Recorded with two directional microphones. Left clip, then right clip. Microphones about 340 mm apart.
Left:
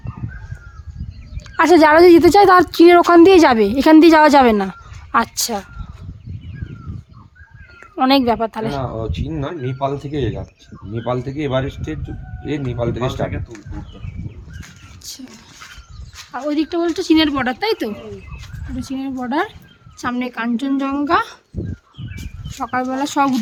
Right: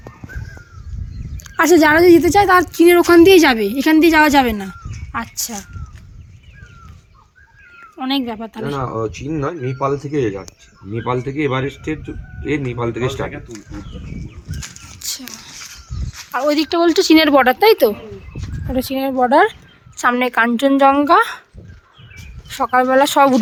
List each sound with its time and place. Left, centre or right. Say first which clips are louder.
1.5 s a woman's voice: left 1 dB; centre
8.0 s a woman's voice: left 7 dB; centre
9.1 s speech: right 3 dB; centre
16.3 s speech: right 4 dB; centre
22.4 s speech: right 7 dB; centre